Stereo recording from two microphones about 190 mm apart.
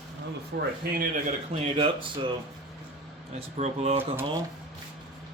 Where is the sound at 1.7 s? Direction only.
25° right (ahead or behind).